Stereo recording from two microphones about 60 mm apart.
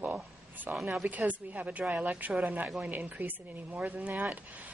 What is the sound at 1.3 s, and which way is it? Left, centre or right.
Speech, right.